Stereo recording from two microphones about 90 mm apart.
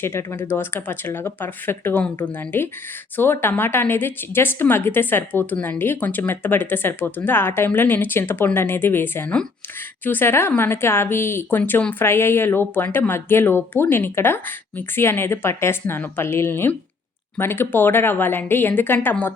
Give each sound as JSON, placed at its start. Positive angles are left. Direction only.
{"t": 0.0, "sound": "a woman's voice", "side_deg": 25}